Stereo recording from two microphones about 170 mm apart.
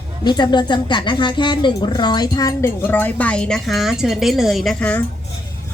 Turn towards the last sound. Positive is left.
turn(degrees=5)  # may be behind; listen again after turning